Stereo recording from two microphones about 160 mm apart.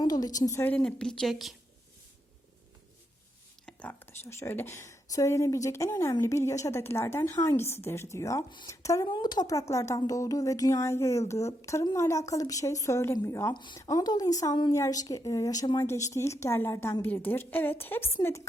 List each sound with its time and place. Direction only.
0.0 s a woman's voice: 25° left (ahead or behind); by 1.5 s centre (ahead or behind)
3.7 s whispering: 10° left (ahead or behind)
4.3 s a woman's voice: 15° left (ahead or behind)